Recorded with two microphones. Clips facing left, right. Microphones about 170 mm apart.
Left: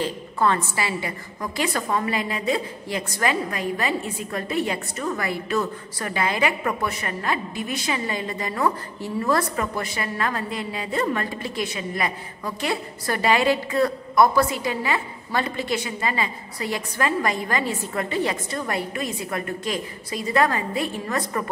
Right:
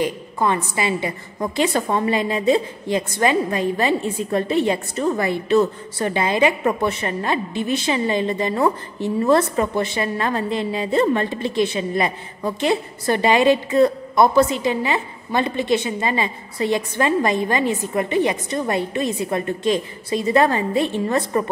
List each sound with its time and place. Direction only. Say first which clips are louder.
0.0 s a woman's voice: right 2 dB; 15° right (ahead or behind)